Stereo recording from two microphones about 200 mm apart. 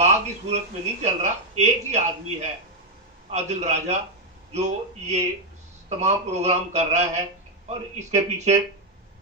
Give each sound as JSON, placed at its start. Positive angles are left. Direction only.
{"t": 0.0, "sound": "speech", "side_deg": -35}
{"t": 3.3, "sound": "speech", "side_deg": -35}